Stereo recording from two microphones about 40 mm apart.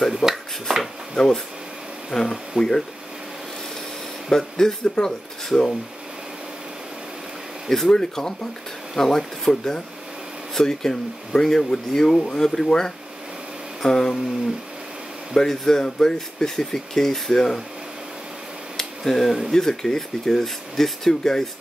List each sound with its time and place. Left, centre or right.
0.1 s speech: centre
0.7 s a sound: centre
1.1 s speech: centre
2.0 s a sound: centre
2.6 s speech: right
4.3 s speech: centre
7.9 s speech: centre
15.3 s speech: centre
18.8 s a sound: centre
19.5 s speech: centre